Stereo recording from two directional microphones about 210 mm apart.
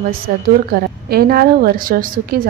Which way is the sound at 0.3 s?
45° right (ahead or behind).